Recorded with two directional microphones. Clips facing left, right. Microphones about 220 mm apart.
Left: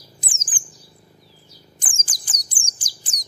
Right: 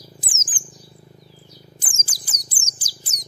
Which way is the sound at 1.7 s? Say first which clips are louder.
Right 1 dB; 5° right (ahead or behind).